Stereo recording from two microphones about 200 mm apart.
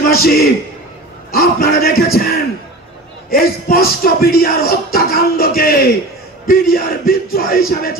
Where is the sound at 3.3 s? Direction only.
50° left (ahead or behind).